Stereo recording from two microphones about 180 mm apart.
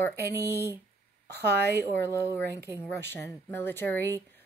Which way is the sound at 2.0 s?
15° left (ahead or behind).